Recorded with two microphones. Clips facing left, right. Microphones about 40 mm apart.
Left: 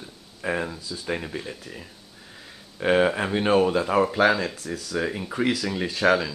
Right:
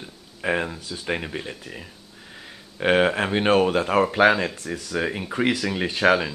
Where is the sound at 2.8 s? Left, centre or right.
Right.